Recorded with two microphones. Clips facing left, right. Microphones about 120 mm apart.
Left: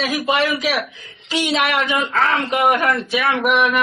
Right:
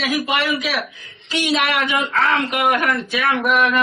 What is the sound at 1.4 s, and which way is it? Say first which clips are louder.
A man's voice: even; 25° left (ahead or behind).